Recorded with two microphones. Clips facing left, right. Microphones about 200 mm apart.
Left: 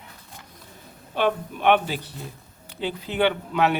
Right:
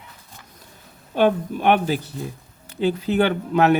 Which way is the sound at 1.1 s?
45° right (ahead or behind).